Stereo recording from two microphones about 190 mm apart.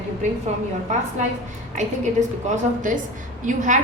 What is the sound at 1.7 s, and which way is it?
Speech, 40° right (ahead or behind).